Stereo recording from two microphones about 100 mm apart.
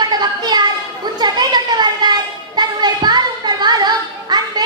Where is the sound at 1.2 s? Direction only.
45° right (ahead or behind).